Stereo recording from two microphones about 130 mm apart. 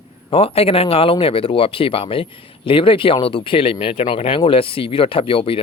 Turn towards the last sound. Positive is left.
turn(degrees=45)  # may be behind; listen again after turning